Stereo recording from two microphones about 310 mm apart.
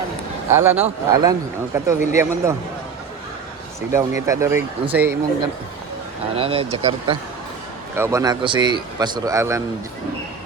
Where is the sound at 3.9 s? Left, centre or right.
Centre.